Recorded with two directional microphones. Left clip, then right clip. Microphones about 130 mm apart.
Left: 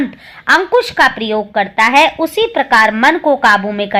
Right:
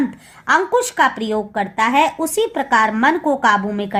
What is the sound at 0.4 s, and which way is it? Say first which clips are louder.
A woman's voice: left 5 dB; 20° left (ahead or behind).